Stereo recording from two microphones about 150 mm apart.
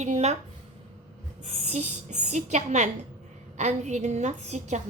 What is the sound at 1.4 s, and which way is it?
A woman's voice, 45° right (ahead or behind).